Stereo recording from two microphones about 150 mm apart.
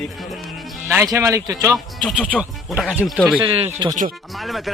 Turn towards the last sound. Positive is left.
turn(degrees=0)  # may be behind; listen again after turning